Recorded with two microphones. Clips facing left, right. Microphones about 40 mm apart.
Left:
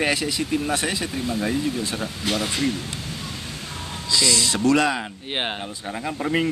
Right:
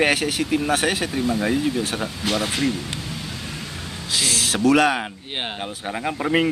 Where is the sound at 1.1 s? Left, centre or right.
Right.